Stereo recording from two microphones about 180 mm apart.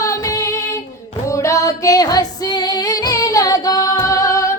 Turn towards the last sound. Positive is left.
turn(degrees=15)  # may be behind; listen again after turning